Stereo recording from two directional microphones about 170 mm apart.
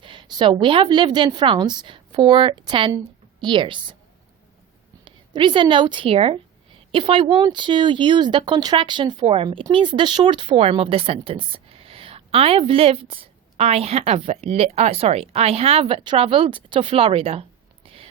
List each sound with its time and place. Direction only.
0.0 s a woman's voice: 30° right (ahead or behind)
5.0 s a woman's voice: 30° right (ahead or behind)
17.8 s a sound: 35° right (ahead or behind)